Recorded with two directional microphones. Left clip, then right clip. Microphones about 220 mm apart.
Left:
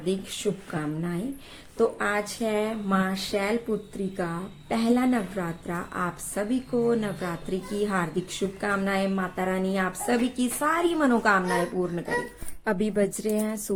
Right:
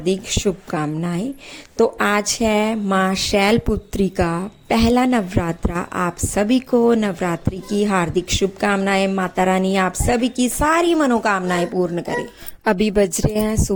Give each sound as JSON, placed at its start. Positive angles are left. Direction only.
{"t": 0.0, "sound": "a woman's voice", "side_deg": -35}
{"t": 12.6, "sound": "a woman's voice", "side_deg": -45}